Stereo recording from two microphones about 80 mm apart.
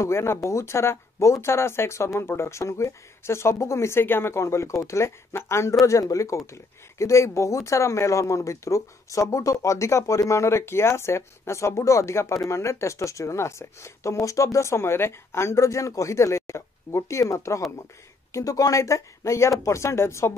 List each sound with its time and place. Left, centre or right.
0.0 s speech: left